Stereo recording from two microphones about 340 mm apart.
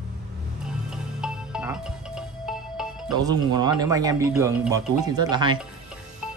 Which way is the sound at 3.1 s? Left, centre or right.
Centre.